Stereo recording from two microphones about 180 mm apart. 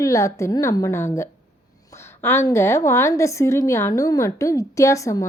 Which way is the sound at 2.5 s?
15° left (ahead or behind).